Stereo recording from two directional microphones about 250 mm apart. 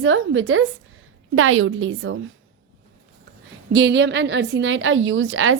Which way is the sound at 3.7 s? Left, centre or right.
Right.